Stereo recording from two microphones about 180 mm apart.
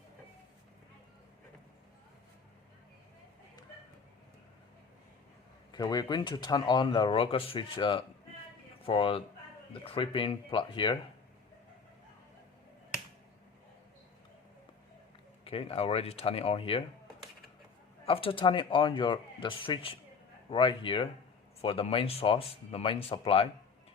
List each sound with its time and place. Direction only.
5.7 s speech: 25° left (ahead or behind)
15.4 s speech: 30° left (ahead or behind)
18.0 s speech: 30° left (ahead or behind)